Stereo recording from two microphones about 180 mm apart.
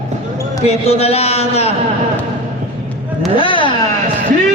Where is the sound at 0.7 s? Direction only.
35° left (ahead or behind).